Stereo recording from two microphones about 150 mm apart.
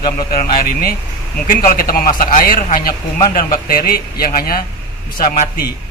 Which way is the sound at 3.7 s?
85° left.